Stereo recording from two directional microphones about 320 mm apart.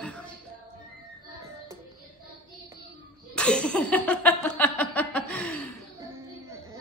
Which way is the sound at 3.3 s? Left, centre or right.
Centre.